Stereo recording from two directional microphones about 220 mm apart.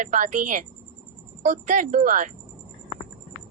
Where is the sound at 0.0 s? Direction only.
35° right (ahead or behind).